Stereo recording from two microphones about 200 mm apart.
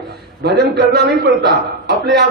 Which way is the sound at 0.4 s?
55° right (ahead or behind).